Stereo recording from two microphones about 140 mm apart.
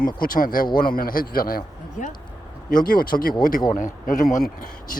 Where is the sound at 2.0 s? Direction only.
65° left (ahead or behind).